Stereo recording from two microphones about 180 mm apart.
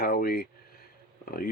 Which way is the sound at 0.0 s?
55° left (ahead or behind).